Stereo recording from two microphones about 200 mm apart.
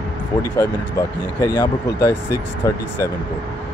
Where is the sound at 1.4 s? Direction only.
20° left (ahead or behind).